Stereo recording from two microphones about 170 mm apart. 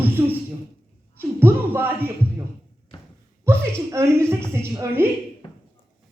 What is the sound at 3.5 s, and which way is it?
A woman's voice, 15° right (ahead or behind).